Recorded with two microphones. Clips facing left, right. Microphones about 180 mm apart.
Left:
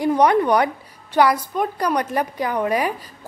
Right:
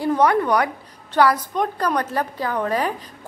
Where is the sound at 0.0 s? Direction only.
15° left (ahead or behind).